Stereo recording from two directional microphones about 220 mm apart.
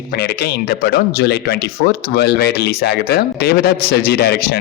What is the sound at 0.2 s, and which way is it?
Speech, 45° left (ahead or behind).